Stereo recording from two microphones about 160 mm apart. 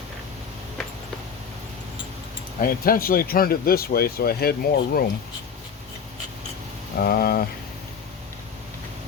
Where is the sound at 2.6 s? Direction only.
65° left (ahead or behind).